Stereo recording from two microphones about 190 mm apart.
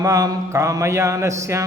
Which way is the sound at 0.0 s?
20° right (ahead or behind).